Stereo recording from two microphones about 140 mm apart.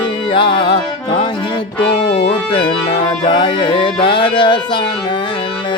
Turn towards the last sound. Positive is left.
turn(degrees=35)  # may be behind; listen again after turning